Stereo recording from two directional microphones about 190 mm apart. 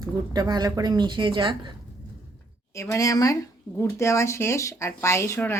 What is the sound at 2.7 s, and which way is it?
Speech, 15° left (ahead or behind).